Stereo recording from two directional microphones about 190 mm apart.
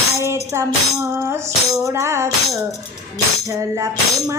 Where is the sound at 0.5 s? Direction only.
15° right (ahead or behind).